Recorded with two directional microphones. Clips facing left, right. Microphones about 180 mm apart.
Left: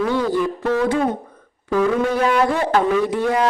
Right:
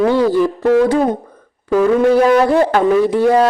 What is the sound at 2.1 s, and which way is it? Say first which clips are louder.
A man's voice: right 7 dB; 35° right (ahead or behind).